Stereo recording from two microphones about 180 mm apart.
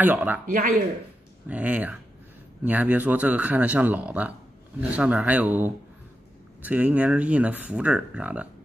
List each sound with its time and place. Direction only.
0.0 s speech: 10° right (ahead or behind)
0.5 s speech: 50° right (ahead or behind)
1.5 s speech: 10° right (ahead or behind)